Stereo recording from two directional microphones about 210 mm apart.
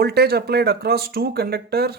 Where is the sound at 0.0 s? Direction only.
50° right (ahead or behind).